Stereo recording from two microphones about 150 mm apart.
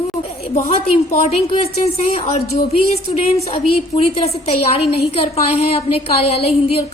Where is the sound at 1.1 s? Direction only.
45° left (ahead or behind).